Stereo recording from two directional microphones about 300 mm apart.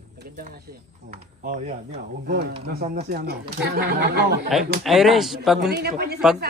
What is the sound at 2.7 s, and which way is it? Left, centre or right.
Speech, right.